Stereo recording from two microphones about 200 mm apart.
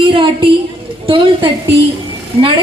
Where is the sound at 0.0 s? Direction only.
25° right (ahead or behind).